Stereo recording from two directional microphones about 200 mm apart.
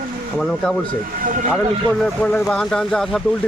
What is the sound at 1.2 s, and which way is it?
Speech, 40° right (ahead or behind).